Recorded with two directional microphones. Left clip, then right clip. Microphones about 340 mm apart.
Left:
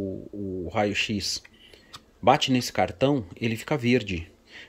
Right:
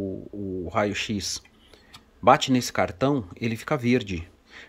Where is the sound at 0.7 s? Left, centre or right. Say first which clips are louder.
Even; centre.